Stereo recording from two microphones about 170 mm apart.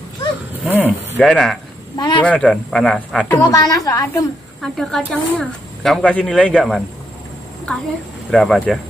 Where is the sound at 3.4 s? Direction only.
20° left (ahead or behind).